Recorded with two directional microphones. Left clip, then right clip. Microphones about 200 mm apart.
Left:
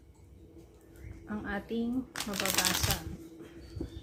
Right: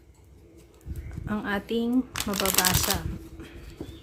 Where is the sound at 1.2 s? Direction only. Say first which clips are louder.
Right 8 dB; 45° right (ahead or behind).